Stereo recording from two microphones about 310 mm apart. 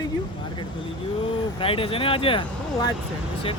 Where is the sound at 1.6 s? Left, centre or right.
Centre.